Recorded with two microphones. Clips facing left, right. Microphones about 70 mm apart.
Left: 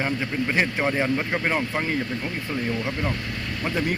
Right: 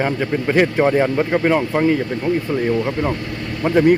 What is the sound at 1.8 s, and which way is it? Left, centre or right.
Speech, right.